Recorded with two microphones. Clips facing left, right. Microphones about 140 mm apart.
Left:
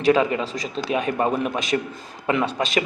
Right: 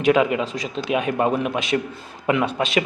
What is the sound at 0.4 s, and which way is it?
Speech, 35° left (ahead or behind).